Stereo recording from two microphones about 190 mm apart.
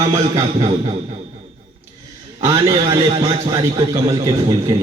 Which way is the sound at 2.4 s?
20° right (ahead or behind).